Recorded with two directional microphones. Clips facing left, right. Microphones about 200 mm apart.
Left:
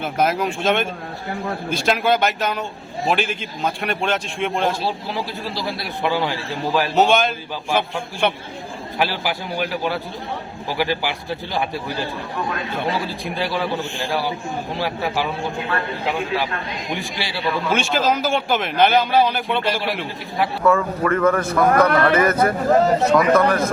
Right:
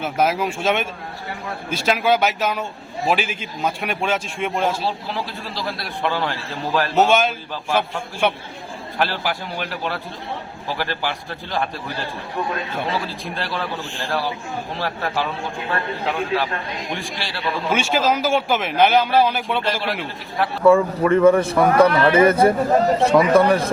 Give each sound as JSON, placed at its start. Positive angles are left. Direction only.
{"t": 0.0, "sound": "a man's voice", "side_deg": -5}
{"t": 6.9, "sound": "a man's voice", "side_deg": -5}
{"t": 13.3, "sound": "a man's voice", "side_deg": 5}
{"t": 17.7, "sound": "a man's voice", "side_deg": -10}
{"t": 20.7, "sound": "a man's voice", "side_deg": -30}
{"t": 21.1, "sound": "a man's voice", "side_deg": -15}
{"t": 21.4, "sound": "a man's voice", "side_deg": -30}